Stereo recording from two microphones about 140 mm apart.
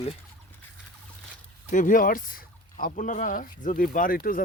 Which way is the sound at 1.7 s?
70° left (ahead or behind).